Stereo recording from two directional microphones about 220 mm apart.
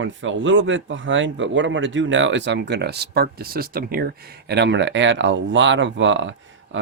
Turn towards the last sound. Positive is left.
turn(degrees=-60)  # may be behind; listen again after turning